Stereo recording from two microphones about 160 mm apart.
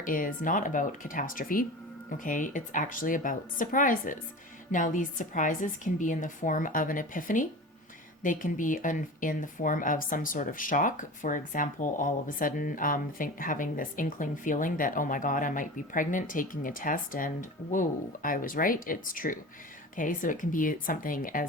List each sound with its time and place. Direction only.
0.0 s speech: 60° left (ahead or behind)